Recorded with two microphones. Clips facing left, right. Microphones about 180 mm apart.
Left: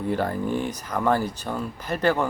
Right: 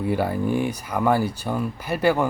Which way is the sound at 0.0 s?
10° right (ahead or behind).